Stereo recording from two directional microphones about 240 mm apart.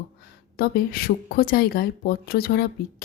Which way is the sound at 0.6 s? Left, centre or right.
Left.